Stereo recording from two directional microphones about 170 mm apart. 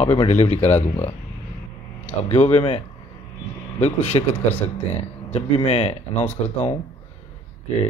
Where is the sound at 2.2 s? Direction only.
40° left (ahead or behind).